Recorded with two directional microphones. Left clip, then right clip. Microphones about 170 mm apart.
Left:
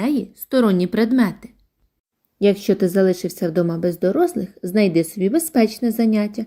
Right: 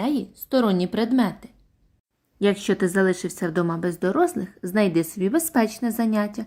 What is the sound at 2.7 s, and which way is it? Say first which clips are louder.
Speech: left 4 dB; 10° left (ahead or behind).